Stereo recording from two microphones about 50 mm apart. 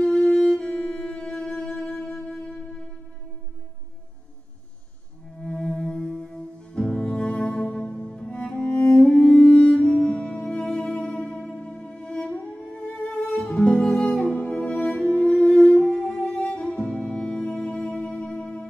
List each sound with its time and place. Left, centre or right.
0.2 s music: left
5.4 s music: centre